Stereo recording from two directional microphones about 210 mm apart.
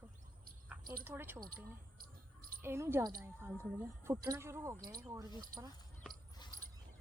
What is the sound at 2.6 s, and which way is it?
Speech, 10° right (ahead or behind).